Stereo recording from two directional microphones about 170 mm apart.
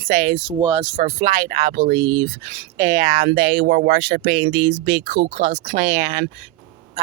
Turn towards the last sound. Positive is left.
turn(degrees=-70)  # may be behind; listen again after turning